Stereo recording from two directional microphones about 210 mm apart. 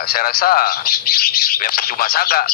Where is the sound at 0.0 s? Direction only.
45° left (ahead or behind).